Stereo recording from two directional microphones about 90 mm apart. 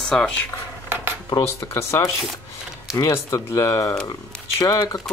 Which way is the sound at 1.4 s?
35° left (ahead or behind).